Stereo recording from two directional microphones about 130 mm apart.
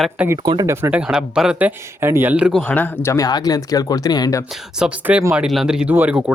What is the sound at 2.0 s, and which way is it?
Speech, 15° right (ahead or behind).